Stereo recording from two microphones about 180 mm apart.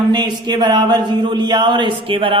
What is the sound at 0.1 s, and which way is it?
A woman's voice, 25° right (ahead or behind).